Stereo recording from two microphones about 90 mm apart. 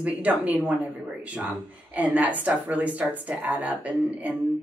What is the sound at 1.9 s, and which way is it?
Speech, 20° right (ahead or behind).